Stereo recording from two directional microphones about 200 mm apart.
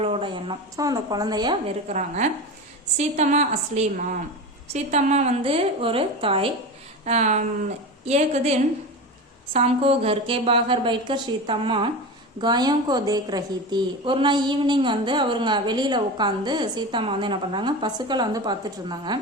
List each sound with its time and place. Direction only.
0.0 s a woman's voice: 25° right (ahead or behind)
1.9 s a woman's voice: 35° right (ahead or behind); by 19.2 s 20° right (ahead or behind)